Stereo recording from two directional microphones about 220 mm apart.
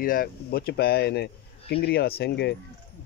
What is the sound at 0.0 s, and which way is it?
Speech, 40° left (ahead or behind).